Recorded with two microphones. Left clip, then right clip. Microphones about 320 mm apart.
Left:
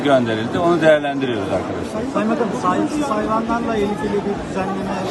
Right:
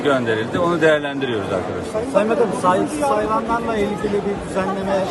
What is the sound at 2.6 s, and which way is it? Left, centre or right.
Speech, right.